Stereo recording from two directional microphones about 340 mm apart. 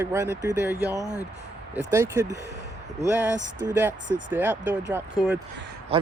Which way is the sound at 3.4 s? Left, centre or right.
Centre.